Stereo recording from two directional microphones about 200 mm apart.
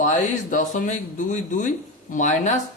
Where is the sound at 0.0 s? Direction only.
35° left (ahead or behind).